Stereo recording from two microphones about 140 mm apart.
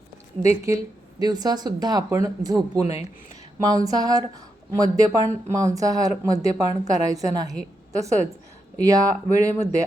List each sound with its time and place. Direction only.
0.4 s a woman's voice: 20° right (ahead or behind)
3.8 s a woman's voice: 25° right (ahead or behind)